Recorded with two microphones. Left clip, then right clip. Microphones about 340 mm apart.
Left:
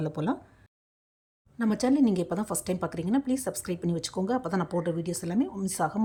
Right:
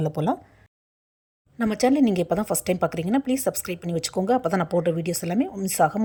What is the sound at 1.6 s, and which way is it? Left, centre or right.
A woman's voice, centre.